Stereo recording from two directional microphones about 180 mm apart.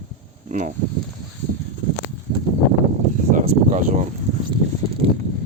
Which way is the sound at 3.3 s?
45° right (ahead or behind).